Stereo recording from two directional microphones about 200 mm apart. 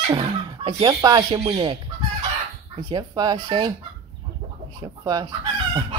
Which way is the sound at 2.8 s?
20° right (ahead or behind).